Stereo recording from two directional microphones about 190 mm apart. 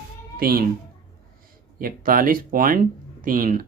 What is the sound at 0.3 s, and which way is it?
Speech, 50° right (ahead or behind).